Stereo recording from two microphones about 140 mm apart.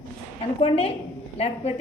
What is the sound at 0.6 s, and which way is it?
A woman's voice, 45° left (ahead or behind).